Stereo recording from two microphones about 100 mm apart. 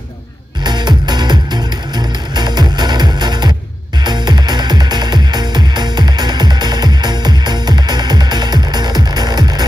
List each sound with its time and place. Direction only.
0.7 s music: 45° right (ahead or behind)